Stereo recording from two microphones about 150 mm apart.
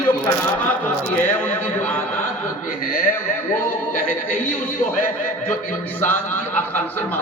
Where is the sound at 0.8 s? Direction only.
15° left (ahead or behind).